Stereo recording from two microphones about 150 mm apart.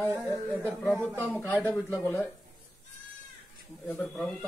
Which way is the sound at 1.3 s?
5° left (ahead or behind).